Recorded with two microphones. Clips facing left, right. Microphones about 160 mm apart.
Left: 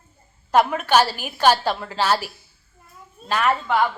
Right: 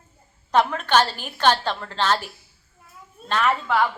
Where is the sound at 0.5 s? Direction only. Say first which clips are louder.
Left 2 dB; 10° left (ahead or behind).